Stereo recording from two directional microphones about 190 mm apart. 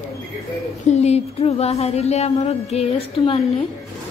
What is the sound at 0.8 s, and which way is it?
A woman's voice, 35° left (ahead or behind).